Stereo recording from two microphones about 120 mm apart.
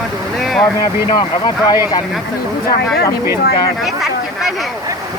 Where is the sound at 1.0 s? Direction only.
40° left (ahead or behind).